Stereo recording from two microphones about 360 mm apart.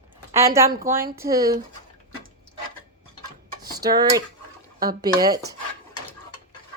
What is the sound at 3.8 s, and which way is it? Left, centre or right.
Speech, centre.